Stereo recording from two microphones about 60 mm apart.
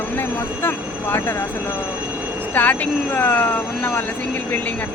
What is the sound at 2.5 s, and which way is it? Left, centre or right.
Speech, left.